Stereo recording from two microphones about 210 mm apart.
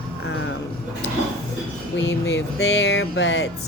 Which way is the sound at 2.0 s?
60° left (ahead or behind).